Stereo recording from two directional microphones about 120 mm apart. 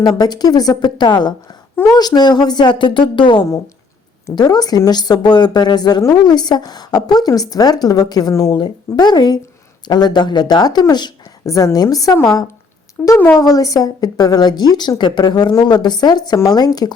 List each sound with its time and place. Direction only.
0.0 s a woman's voice: 35° left (ahead or behind)
13.0 s speech: 10° left (ahead or behind)
13.4 s a woman's voice: 30° left (ahead or behind)